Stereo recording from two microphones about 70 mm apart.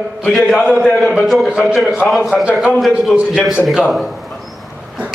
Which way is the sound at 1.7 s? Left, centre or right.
Centre.